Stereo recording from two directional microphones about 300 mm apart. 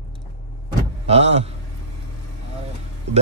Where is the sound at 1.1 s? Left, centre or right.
Right.